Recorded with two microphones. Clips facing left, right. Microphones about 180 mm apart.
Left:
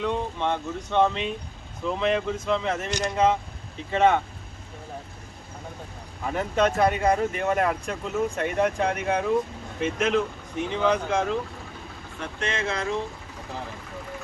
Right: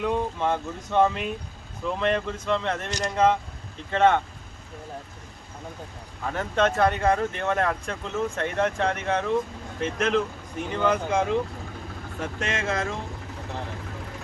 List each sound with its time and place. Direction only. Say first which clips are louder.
0.0 s speech: right 1 dB; 5° right (ahead or behind)
6.2 s speech: left 1 dB; 15° left (ahead or behind); by 11.3 s 10° right (ahead or behind)
12.6 s speech: right 4 dB; 45° right (ahead or behind)